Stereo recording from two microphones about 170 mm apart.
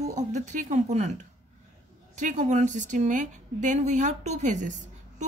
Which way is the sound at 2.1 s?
45° right (ahead or behind).